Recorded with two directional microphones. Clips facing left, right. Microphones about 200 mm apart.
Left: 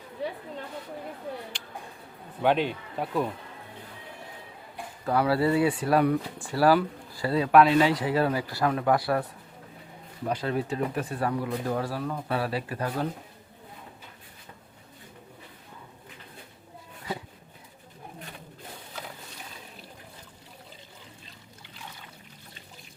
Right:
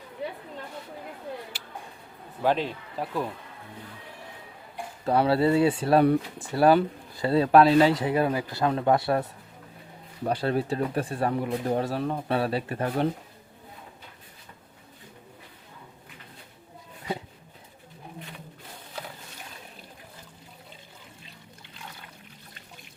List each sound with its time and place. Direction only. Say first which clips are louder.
1.5 s a sound: even; 5° right (ahead or behind)
2.4 s a man's voice: left 1 dB; centre (ahead or behind)
5.0 s speech: right 2 dB; 25° right (ahead or behind)
10.2 s speech: right 3 dB; 35° right (ahead or behind)